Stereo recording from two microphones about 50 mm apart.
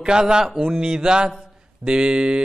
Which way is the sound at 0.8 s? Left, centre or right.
Centre.